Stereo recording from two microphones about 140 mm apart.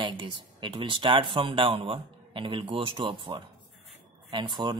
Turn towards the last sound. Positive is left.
turn(degrees=-35)  # may be behind; listen again after turning